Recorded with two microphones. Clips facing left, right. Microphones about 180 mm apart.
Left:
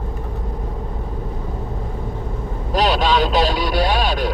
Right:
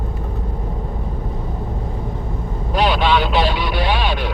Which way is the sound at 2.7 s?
40° left (ahead or behind).